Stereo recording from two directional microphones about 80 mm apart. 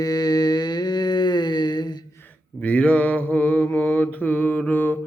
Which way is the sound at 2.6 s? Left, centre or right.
Centre.